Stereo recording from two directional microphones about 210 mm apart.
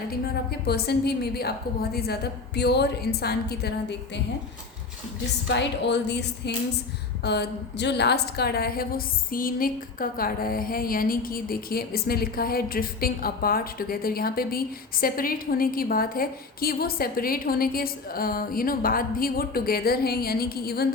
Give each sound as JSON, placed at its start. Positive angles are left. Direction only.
{"t": 0.6, "sound": "a woman's voice", "side_deg": 50}
{"t": 5.5, "sound": "a woman's voice", "side_deg": 55}